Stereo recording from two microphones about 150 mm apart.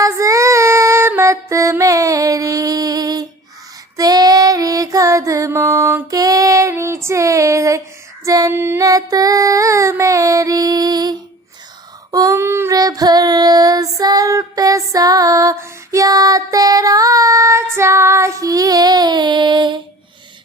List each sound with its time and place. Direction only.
0.0 s female singing: 20° right (ahead or behind)
8.2 s child singing: 25° right (ahead or behind)
12.1 s child singing: 20° right (ahead or behind)